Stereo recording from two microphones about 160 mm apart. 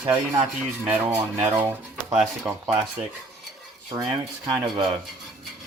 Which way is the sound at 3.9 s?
25° right (ahead or behind).